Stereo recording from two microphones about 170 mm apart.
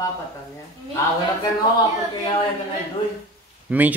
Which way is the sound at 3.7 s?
10° right (ahead or behind).